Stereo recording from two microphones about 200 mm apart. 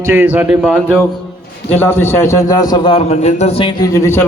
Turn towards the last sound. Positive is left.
turn(degrees=15)  # may be behind; listen again after turning